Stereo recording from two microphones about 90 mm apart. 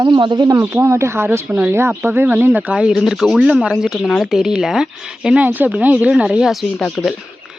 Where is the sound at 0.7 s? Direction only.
30° right (ahead or behind); by 6.6 s 5° right (ahead or behind).